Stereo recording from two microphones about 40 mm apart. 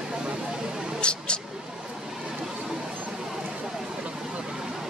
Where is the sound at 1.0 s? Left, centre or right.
Left.